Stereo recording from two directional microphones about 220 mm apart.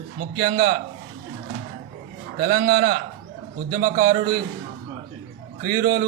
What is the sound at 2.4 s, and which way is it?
A man's voice, 45° right (ahead or behind).